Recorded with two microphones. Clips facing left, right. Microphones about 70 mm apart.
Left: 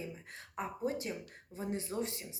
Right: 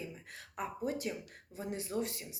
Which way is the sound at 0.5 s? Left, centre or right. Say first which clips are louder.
Left 1 dB; left.